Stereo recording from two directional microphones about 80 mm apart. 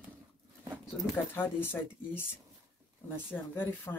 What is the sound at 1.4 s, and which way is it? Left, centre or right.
Speech, left.